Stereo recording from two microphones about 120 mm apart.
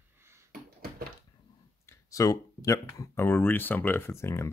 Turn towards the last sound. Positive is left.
turn(degrees=20)  # may be behind; listen again after turning